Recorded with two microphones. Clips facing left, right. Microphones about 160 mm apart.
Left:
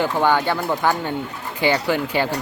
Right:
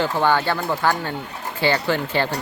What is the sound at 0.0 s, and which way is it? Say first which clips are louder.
Speech: left 1 dB; 15° left (ahead or behind).